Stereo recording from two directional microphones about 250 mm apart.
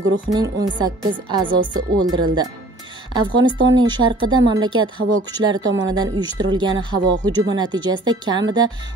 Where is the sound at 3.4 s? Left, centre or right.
Centre.